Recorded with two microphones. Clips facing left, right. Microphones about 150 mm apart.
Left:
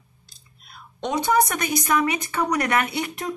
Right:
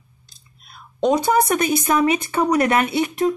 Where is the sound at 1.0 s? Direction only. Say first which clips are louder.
Right 4 dB; 35° right (ahead or behind).